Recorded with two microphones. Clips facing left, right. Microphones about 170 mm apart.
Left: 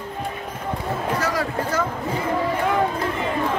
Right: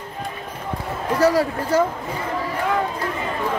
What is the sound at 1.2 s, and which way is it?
Speech, 35° right (ahead or behind).